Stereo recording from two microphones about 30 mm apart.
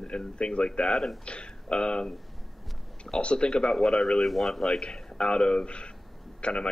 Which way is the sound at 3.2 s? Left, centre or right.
Left.